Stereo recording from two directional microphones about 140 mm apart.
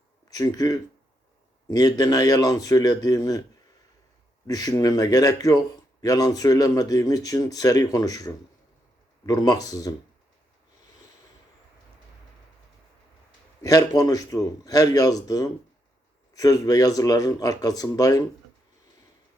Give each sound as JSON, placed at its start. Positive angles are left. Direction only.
{"t": 0.3, "sound": "speech", "side_deg": 25}
{"t": 4.4, "sound": "speech", "side_deg": 25}
{"t": 13.6, "sound": "speech", "side_deg": 25}